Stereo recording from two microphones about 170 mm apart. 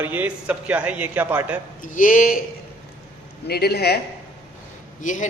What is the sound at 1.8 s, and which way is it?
Speech, 50° left (ahead or behind).